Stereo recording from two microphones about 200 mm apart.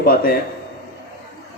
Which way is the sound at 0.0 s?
50° left (ahead or behind).